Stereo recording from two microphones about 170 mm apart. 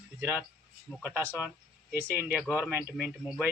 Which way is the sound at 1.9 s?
10° right (ahead or behind).